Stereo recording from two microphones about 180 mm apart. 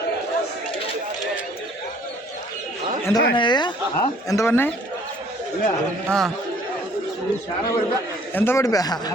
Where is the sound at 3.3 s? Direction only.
25° left (ahead or behind).